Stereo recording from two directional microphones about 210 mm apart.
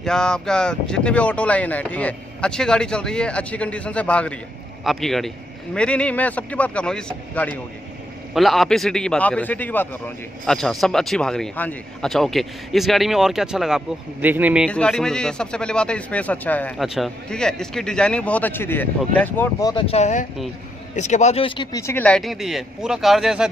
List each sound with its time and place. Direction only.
0.0 s a man's voice: 5° left (ahead or behind)
14.7 s a man's voice: 5° left (ahead or behind)
19.7 s speech: 25° left (ahead or behind)
21.8 s a man's voice: 5° left (ahead or behind)